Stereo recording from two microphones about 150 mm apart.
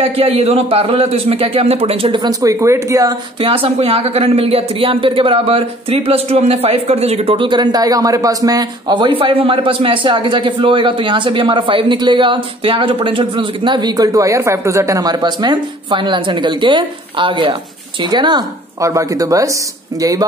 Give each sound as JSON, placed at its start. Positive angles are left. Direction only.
{"t": 0.0, "sound": "speech", "side_deg": -40}
{"t": 3.3, "sound": "speech", "side_deg": -40}